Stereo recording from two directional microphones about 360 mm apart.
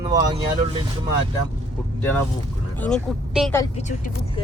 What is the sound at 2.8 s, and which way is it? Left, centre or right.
Speech, centre.